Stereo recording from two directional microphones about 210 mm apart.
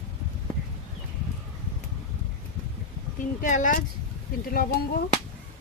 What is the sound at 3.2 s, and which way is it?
Speech, 35° left (ahead or behind).